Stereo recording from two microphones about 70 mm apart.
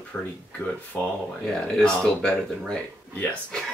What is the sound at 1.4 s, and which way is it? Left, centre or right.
Speech, centre.